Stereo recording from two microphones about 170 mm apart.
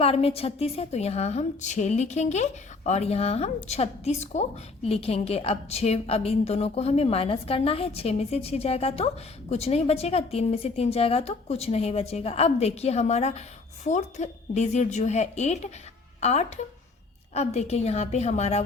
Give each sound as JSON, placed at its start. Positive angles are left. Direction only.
{"t": 0.0, "sound": "a woman's voice", "side_deg": 35}